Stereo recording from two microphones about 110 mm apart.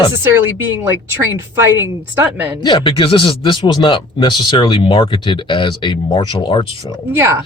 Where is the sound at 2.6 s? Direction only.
50° left (ahead or behind).